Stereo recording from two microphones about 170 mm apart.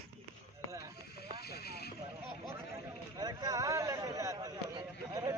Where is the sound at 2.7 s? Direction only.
20° right (ahead or behind).